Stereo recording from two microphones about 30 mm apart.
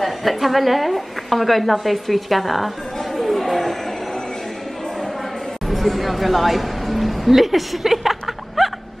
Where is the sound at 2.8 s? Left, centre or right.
Centre.